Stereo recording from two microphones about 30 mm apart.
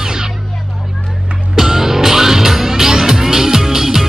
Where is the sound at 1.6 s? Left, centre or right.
Centre.